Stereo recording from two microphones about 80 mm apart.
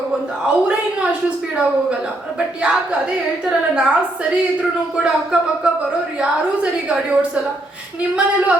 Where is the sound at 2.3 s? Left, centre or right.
Centre.